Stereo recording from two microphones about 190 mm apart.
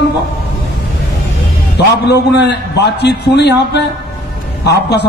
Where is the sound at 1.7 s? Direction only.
60° left (ahead or behind).